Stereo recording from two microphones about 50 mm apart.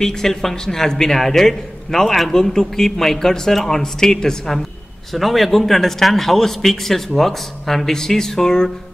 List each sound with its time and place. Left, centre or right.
0.0 s a man's voice: centre
5.1 s a man's voice: centre